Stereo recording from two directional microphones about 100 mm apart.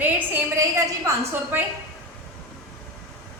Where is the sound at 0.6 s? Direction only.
30° right (ahead or behind).